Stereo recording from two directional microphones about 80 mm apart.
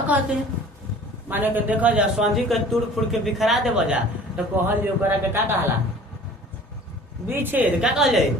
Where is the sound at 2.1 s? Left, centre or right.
Centre.